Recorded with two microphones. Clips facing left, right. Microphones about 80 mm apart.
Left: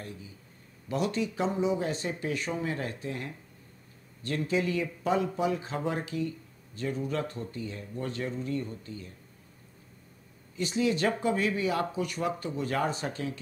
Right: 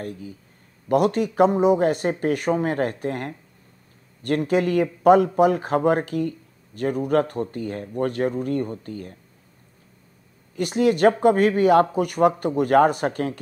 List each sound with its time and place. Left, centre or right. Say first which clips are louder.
0.0 s speech: right 10 dB; right
10.5 s speech: right 8 dB; right